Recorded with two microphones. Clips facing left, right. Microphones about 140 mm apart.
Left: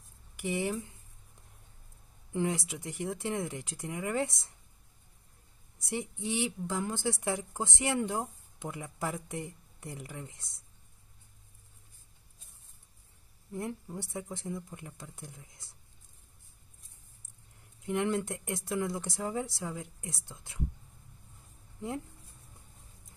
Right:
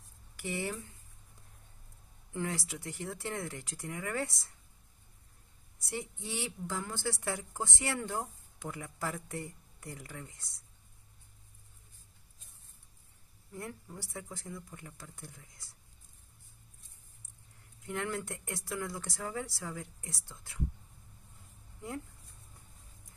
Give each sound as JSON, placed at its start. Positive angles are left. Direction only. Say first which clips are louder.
{"t": 0.4, "sound": "speech", "louder": "left 5 dB", "side_deg": 15}
{"t": 2.3, "sound": "a woman's voice", "louder": "left 5 dB", "side_deg": 20}
{"t": 5.8, "sound": "a woman's voice", "louder": "left 4 dB", "side_deg": 20}
{"t": 13.5, "sound": "a woman's voice", "louder": "left 6 dB", "side_deg": 20}
{"t": 17.8, "sound": "a woman's voice", "louder": "left 6 dB", "side_deg": 20}